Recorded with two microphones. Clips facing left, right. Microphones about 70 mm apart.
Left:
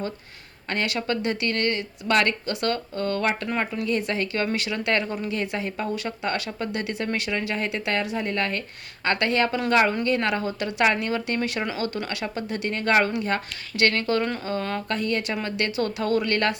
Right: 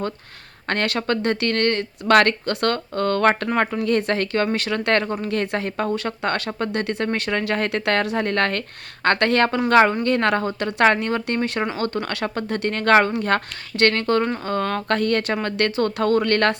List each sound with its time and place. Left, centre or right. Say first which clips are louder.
0.7 s speech: right 4 dB; right
3.6 s speech: right 6 dB; right
3.8 s a woman's voice: right 5 dB; right
9.0 s speech: right 5 dB; right
9.7 s speech: right 6 dB; right
10.0 s speech: right 4 dB; right